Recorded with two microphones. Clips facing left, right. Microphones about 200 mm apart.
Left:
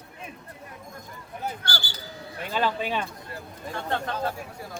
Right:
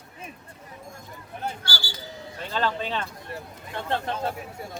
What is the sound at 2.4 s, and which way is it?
Speech, 10° left (ahead or behind).